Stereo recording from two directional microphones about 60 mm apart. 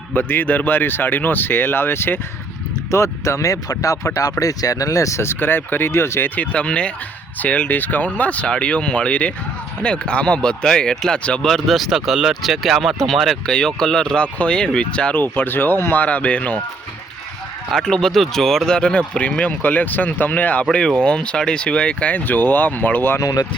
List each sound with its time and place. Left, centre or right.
0.1 s speech: left
2.9 s speech: left
5.2 s speech: left
6.3 s speech: left
11.4 s speech: centre
13.5 s speech: centre
15.2 s speech: left
17.7 s speech: centre; by 20.7 s left
20.7 s speech: centre; by 23.1 s left
23.2 s speech: left